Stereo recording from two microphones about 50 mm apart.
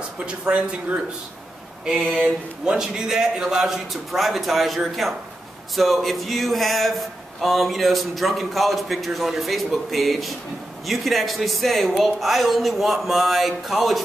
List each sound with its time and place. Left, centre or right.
0.2 s a man's voice: right
2.0 s speech: centre
2.6 s a man's voice: centre